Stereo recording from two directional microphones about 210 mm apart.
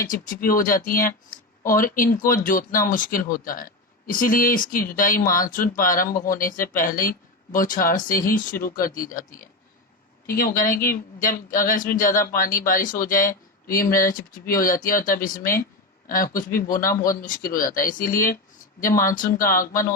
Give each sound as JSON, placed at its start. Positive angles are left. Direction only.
{"t": 0.0, "sound": "speech", "side_deg": 40}
{"t": 10.2, "sound": "speech", "side_deg": 40}